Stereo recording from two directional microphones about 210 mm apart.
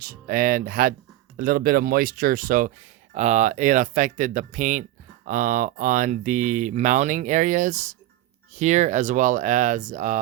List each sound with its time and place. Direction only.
0.0 s speech: 45° right (ahead or behind)